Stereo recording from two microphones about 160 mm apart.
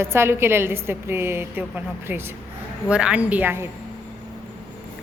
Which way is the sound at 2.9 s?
5° right (ahead or behind).